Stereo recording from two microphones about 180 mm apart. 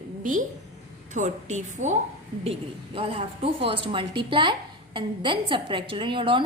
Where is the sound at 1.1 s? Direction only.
40° right (ahead or behind).